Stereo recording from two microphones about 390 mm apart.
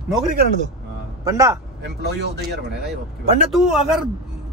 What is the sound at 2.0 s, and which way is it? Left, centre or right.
Speech, right.